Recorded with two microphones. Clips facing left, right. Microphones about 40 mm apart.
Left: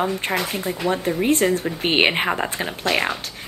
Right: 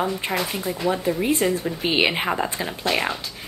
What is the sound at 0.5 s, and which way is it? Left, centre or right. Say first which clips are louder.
A woman's voice: left 1 dB; left.